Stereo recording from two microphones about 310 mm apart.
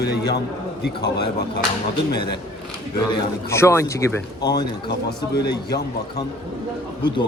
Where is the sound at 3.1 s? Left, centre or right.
Centre.